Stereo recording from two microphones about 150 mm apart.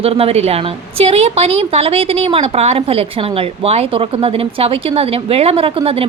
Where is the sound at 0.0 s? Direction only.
40° right (ahead or behind).